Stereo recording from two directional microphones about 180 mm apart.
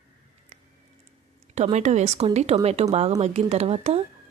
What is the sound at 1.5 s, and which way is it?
Speech, 40° right (ahead or behind).